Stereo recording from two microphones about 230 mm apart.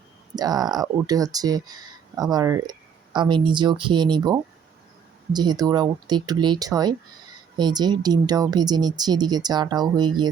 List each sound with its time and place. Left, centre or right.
0.3 s speech: centre